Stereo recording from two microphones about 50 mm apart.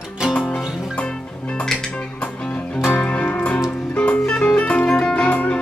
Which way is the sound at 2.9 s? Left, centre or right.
Left.